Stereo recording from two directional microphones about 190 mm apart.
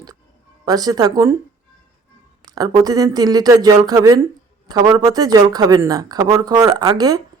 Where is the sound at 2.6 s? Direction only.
20° right (ahead or behind).